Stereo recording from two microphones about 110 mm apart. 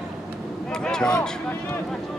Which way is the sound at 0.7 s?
5° left (ahead or behind).